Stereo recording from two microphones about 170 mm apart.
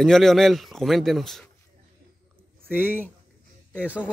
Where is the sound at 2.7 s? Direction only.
10° right (ahead or behind).